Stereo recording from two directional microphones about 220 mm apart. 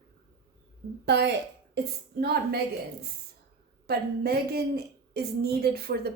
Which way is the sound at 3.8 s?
45° right (ahead or behind).